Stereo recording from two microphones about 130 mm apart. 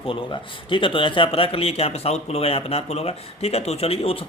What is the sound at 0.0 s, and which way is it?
Speech, 45° left (ahead or behind).